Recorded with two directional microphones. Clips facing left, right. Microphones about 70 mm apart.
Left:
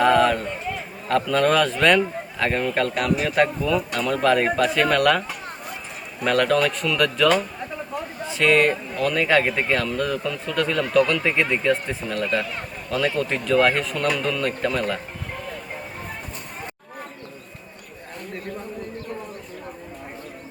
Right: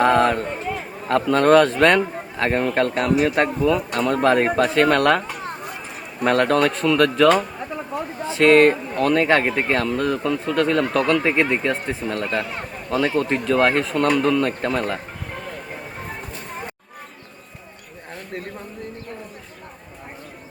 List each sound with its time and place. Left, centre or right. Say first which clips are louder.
0.0 s a man's voice: right 1 dB; right
6.2 s a man's voice: right 2 dB; right
8.2 s a sound: right 5 dB; right
9.0 s a man's voice: right 1 dB; right